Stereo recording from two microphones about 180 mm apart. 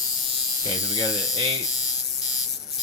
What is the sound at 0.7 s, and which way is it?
Speech, 30° right (ahead or behind).